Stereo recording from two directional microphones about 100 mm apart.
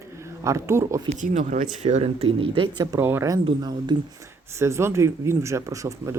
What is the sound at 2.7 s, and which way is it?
Speech, 45° right (ahead or behind).